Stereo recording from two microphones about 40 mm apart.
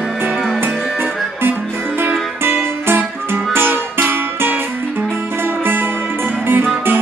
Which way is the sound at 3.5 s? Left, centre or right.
Right.